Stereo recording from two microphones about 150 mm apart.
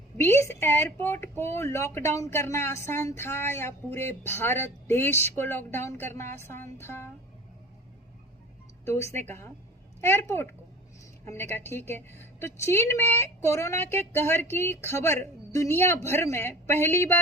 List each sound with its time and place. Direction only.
0.2 s speech: 20° left (ahead or behind)
9.2 s speech: 15° left (ahead or behind)